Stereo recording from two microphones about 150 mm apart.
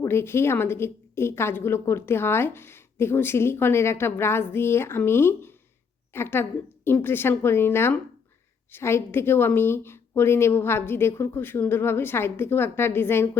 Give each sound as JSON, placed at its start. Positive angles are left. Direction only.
{"t": 0.0, "sound": "a woman's voice", "side_deg": 15}